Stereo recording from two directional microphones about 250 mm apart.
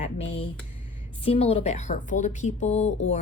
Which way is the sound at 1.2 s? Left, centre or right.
Left.